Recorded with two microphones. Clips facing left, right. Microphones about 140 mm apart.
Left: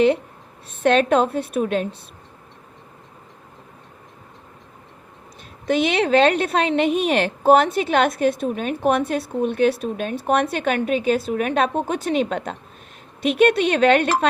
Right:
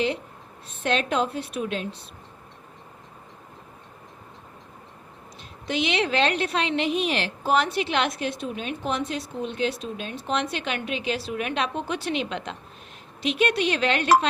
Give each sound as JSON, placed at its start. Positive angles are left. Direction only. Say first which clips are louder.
{"t": 0.8, "sound": "a woman's voice", "louder": "left 8 dB", "side_deg": 55}
{"t": 5.6, "sound": "a woman's voice", "louder": "left 6 dB", "side_deg": 50}